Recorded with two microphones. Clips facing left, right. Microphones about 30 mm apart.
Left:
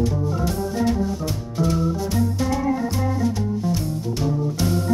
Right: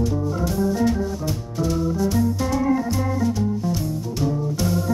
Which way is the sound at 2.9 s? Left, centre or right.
Centre.